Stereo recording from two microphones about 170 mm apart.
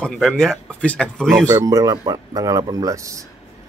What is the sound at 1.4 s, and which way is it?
Speech, 20° right (ahead or behind).